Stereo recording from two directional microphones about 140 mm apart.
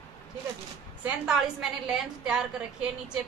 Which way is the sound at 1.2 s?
5° right (ahead or behind).